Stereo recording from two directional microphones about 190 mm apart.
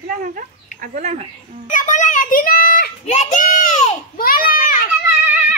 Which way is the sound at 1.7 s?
40° left (ahead or behind).